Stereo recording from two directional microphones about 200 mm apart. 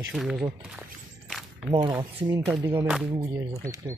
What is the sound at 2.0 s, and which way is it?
Speech, 20° right (ahead or behind).